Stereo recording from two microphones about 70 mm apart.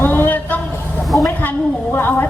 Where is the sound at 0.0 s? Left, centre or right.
Left.